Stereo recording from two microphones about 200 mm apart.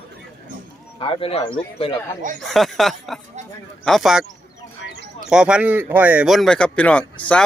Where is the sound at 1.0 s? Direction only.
25° left (ahead or behind).